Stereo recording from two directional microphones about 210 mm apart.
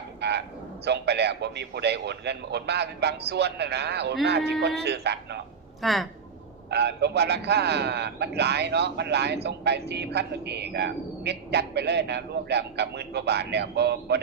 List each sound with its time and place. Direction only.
0.2 s a sound: 55° right (ahead or behind)
0.9 s a man's voice: 50° right (ahead or behind)
5.8 s speech: centre (ahead or behind)
6.7 s a man's voice: 50° right (ahead or behind)